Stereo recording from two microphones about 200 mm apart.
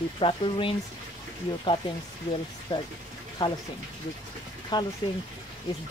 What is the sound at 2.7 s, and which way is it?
Speech, 25° left (ahead or behind).